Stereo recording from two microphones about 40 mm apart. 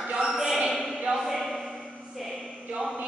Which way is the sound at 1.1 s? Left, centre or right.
Right.